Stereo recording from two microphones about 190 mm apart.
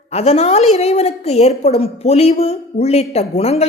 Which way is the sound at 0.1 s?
35° left (ahead or behind).